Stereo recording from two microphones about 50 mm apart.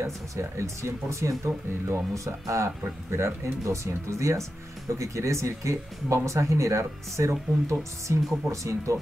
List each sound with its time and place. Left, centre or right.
0.0 s speech: right
3.1 s speech: right
4.9 s speech: right
8.5 s speech: right